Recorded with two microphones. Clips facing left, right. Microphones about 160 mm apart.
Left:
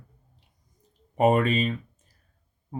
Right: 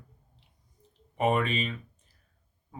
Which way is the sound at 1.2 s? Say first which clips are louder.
Left 6 dB; 40° left (ahead or behind).